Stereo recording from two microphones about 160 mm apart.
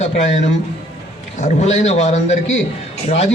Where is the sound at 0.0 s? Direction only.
45° left (ahead or behind).